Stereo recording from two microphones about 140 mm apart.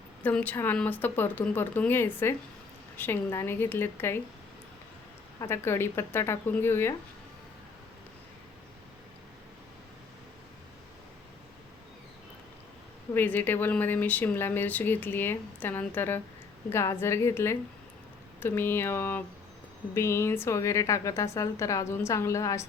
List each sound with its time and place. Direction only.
0.2 s speech: 10° left (ahead or behind)
5.4 s speech: 20° left (ahead or behind)
13.1 s a woman's voice: 15° left (ahead or behind)